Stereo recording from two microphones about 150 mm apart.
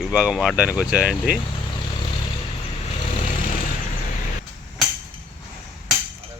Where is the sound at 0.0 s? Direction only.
5° right (ahead or behind).